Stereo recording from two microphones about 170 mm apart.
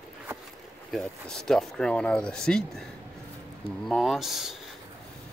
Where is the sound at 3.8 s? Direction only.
Centre (ahead or behind).